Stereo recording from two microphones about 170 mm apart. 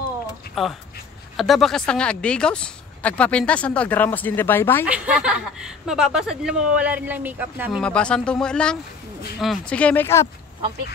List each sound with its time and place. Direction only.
0.6 s speech: centre (ahead or behind)
4.8 s a woman's voice: 5° right (ahead or behind)
7.8 s speech: 5° left (ahead or behind)